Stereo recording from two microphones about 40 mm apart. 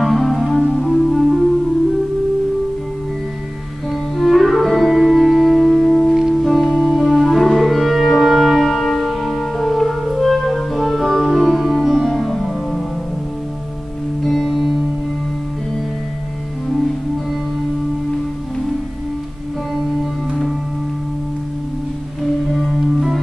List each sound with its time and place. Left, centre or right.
0.0 s music: centre
3.9 s music: centre
14.2 s music: centre
22.5 s music: centre